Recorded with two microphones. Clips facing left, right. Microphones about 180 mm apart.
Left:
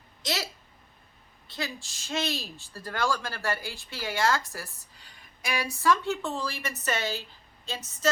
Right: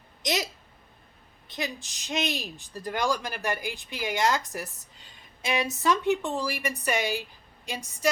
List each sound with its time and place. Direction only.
0.2 s hiccup: 15° right (ahead or behind)
1.5 s speech: 20° right (ahead or behind)